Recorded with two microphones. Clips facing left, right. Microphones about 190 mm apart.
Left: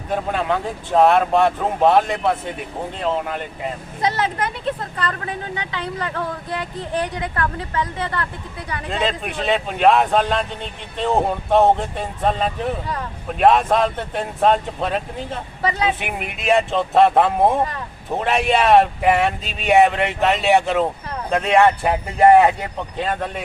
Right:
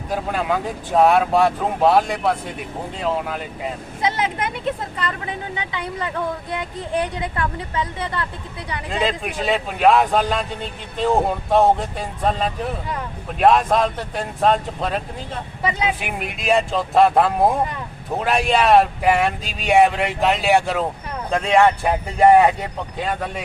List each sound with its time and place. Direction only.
0.1 s speech: centre (ahead or behind)
4.2 s speech: 15° right (ahead or behind)
8.9 s speech: centre (ahead or behind)